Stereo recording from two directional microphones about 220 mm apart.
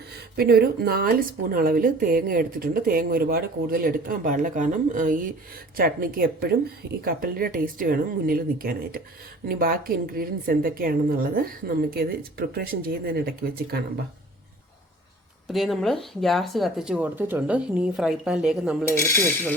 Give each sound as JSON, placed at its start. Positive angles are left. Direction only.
{"t": 0.1, "sound": "speech", "side_deg": -45}
{"t": 15.4, "sound": "speech", "side_deg": 0}
{"t": 18.9, "sound": "speech", "side_deg": 10}